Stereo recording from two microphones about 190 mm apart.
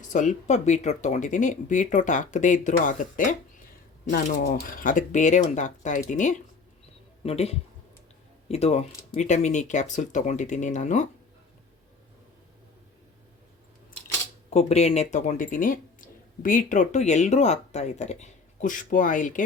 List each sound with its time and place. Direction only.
0.1 s speech: 40° left (ahead or behind)
14.5 s speech: 35° left (ahead or behind)